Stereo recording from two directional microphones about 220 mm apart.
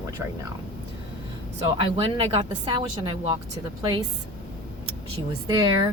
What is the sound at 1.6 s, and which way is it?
A woman's voice, 25° right (ahead or behind).